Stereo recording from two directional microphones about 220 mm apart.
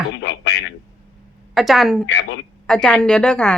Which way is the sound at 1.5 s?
Centre (ahead or behind).